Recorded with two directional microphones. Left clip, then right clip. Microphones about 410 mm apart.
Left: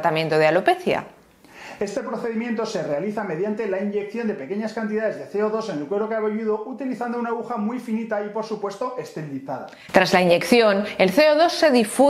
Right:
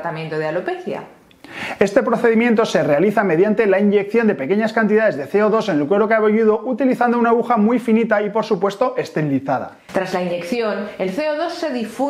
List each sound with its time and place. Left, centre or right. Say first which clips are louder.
0.0 s a woman's voice: left 5 dB; left
1.8 s speech: right 11 dB; right
9.9 s a woman's voice: left 5 dB; left